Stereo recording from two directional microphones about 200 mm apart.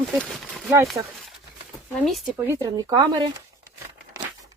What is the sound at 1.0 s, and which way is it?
Speech, 20° right (ahead or behind).